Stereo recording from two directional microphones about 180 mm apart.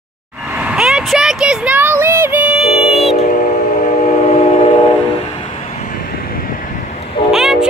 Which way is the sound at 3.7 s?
40° left (ahead or behind).